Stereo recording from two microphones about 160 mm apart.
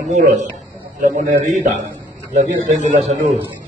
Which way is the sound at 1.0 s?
55° right (ahead or behind).